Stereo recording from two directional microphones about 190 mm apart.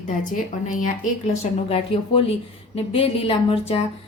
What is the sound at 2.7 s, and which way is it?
Speech, 30° left (ahead or behind).